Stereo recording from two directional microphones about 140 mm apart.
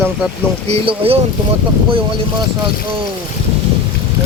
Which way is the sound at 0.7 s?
45° right (ahead or behind).